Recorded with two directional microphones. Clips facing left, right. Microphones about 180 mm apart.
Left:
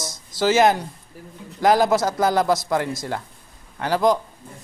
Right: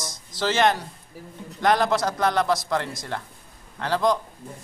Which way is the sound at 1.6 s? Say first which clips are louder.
Left 4 dB; 25° left (ahead or behind).